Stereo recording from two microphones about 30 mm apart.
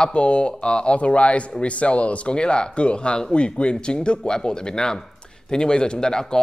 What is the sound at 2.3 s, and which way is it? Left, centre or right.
Speech, left.